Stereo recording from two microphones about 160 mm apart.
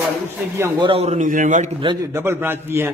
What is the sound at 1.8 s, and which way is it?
A man's voice, 25° right (ahead or behind).